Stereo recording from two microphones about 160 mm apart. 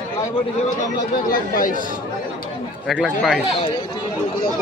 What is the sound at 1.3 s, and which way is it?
Speech, 60° left (ahead or behind).